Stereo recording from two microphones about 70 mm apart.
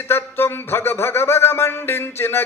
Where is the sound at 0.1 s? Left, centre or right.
Left.